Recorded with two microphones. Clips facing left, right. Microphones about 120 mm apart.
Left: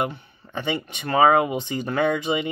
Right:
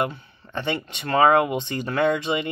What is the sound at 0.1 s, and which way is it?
Speech, 10° left (ahead or behind).